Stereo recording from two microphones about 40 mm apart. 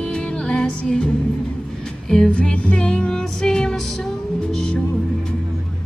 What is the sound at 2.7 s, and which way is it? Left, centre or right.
Music, left.